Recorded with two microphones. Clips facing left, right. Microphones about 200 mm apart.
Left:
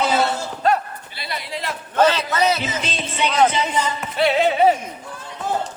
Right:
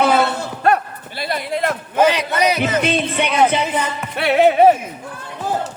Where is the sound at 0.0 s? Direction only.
55° right (ahead or behind).